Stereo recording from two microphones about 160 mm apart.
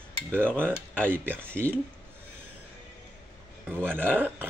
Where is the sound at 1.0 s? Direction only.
15° right (ahead or behind).